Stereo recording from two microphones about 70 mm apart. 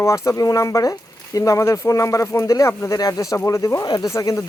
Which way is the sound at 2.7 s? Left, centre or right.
Left.